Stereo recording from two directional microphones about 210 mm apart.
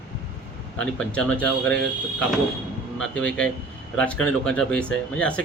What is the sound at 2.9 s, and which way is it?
A man's voice, 5° left (ahead or behind).